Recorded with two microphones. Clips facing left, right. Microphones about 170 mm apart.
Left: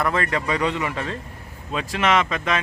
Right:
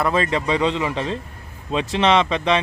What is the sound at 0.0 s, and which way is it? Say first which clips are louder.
Speech: right 3 dB; 20° right (ahead or behind).